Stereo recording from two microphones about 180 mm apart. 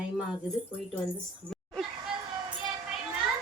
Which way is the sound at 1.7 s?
Centre (ahead or behind).